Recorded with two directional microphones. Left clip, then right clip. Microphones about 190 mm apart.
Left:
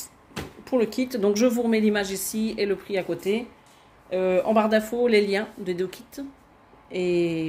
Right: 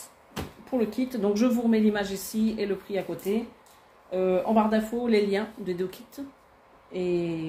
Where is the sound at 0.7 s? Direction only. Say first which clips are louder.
Left 4 dB; 60° left (ahead or behind).